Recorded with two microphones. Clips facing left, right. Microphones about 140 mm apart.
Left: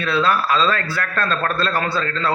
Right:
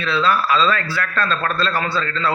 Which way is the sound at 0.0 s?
50° left (ahead or behind).